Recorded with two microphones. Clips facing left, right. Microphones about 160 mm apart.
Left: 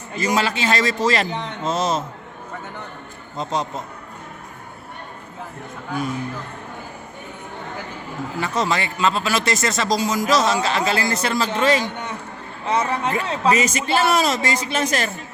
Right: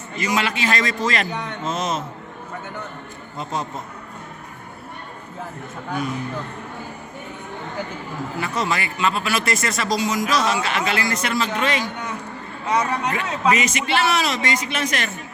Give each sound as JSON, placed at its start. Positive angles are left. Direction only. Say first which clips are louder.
{"t": 0.2, "sound": "a man's voice", "louder": "left 2 dB", "side_deg": 35}
{"t": 8.4, "sound": "speech", "louder": "left 2 dB", "side_deg": 30}
{"t": 9.9, "sound": "a man's voice", "louder": "left 2 dB", "side_deg": 35}